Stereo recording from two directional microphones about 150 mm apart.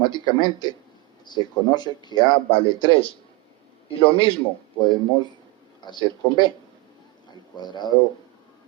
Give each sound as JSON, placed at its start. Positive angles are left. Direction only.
{"t": 0.0, "sound": "a man's voice", "side_deg": 30}
{"t": 7.5, "sound": "speech", "side_deg": 30}